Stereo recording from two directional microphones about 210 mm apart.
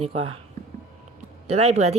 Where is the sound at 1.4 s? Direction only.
30° right (ahead or behind).